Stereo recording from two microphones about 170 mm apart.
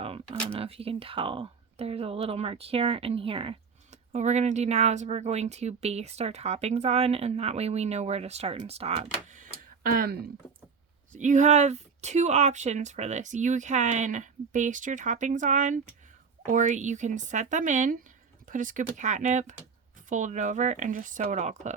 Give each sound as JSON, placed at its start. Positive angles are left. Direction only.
{"t": 0.0, "sound": "a sound", "side_deg": -35}
{"t": 0.5, "sound": "speech", "side_deg": -35}
{"t": 11.1, "sound": "speech", "side_deg": -45}